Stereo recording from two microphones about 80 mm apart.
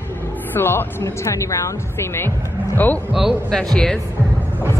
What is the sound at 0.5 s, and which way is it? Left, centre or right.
A woman's voice, left.